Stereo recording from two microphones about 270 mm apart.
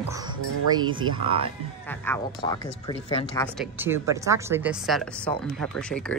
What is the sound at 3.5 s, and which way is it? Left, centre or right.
A woman's voice, centre.